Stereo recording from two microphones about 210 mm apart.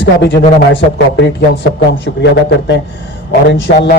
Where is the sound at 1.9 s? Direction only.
55° left (ahead or behind).